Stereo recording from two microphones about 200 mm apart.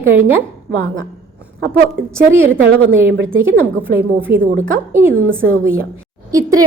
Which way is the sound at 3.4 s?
10° right (ahead or behind).